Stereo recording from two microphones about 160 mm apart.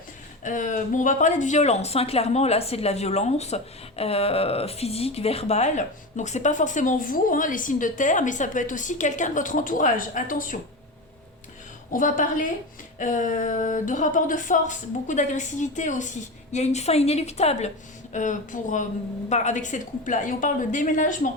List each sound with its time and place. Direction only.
0.4 s speech: 55° left (ahead or behind)
11.9 s a woman's voice: 55° left (ahead or behind)